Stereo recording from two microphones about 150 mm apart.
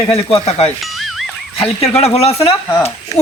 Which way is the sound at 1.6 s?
40° left (ahead or behind).